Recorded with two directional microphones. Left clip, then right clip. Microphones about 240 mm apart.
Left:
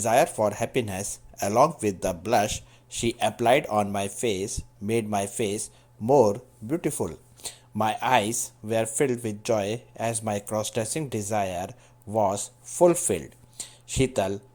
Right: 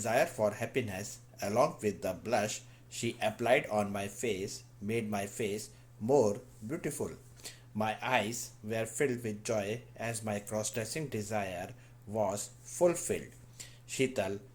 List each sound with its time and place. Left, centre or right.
0.0 s speech: left